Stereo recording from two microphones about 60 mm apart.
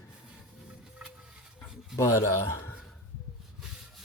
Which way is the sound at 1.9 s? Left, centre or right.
Left.